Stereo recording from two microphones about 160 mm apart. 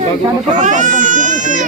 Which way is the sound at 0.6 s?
50° right (ahead or behind).